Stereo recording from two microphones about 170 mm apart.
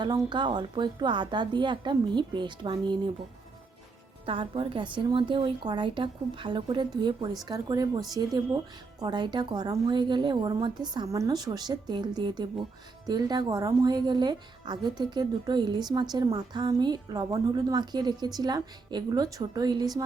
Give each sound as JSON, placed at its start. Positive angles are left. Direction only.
{"t": 0.0, "sound": "a woman's voice", "side_deg": -25}
{"t": 4.3, "sound": "a woman's voice", "side_deg": -30}